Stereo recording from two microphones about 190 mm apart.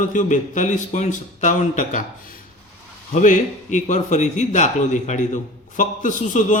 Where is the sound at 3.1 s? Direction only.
40° left (ahead or behind).